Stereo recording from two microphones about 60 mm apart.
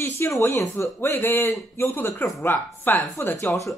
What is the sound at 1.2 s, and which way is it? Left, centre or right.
Speech, left.